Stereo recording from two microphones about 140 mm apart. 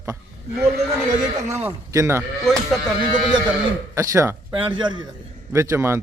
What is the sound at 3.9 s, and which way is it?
Speech, 20° right (ahead or behind).